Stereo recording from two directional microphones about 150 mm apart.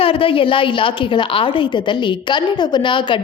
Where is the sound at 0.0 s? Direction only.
35° left (ahead or behind).